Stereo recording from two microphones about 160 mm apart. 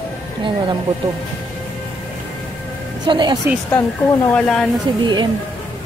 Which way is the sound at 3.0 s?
30° right (ahead or behind).